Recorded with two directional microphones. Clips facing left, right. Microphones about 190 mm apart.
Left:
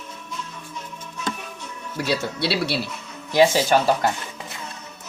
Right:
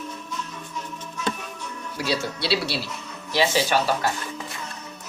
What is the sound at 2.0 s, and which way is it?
Speech, 55° left (ahead or behind).